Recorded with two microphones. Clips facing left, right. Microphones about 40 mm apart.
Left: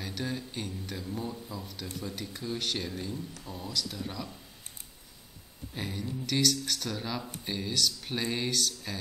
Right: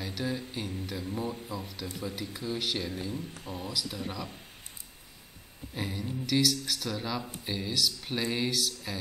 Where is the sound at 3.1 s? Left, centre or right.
Right.